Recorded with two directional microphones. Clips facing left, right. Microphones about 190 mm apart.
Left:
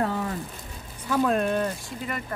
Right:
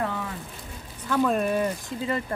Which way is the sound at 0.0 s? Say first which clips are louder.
Left 3 dB; 40° left (ahead or behind).